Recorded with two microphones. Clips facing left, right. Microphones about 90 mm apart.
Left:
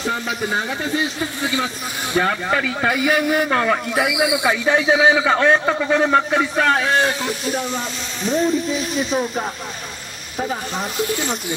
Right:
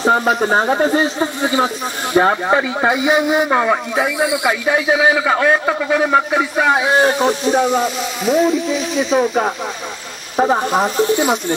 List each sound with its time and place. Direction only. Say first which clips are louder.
0.0 s speech: right 9 dB; 45° right (ahead or behind); by 3.8 s 15° right (ahead or behind)
3.9 s speech: right 2 dB; centre (ahead or behind)
4.4 s a man's voice: right 1 dB; 10° right (ahead or behind)
7.5 s speech: right 7 dB; 35° right (ahead or behind)
8.2 s speech: right 4 dB; 5° right (ahead or behind)
9.1 s speech: right 9 dB; 45° right (ahead or behind)
10.3 s speech: right 10 dB; 55° right (ahead or behind)